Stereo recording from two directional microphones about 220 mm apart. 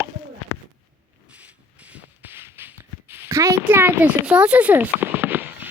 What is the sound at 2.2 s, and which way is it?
Beatboxing, 10° right (ahead or behind).